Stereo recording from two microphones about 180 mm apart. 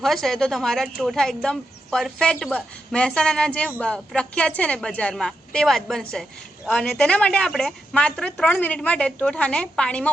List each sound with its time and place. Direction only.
0.0 s speech: centre (ahead or behind)